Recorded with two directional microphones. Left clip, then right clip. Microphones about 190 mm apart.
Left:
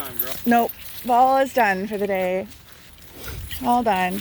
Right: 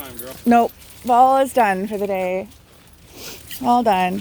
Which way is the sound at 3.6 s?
25° right (ahead or behind).